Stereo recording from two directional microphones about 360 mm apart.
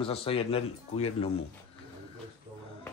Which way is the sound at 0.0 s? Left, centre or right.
Centre.